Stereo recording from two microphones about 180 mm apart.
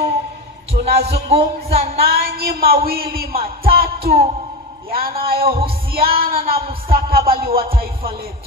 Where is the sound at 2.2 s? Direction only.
60° right (ahead or behind).